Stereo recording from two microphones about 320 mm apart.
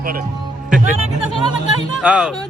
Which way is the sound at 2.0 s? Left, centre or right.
Centre.